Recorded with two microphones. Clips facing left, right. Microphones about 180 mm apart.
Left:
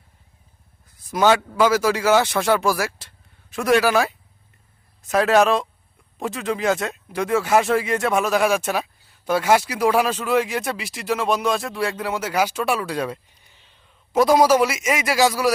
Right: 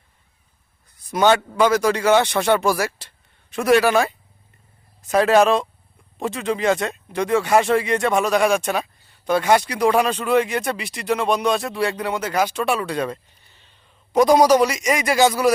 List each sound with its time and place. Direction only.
0.9 s speech: centre (ahead or behind)